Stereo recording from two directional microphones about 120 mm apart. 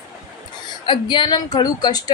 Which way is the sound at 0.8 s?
40° left (ahead or behind).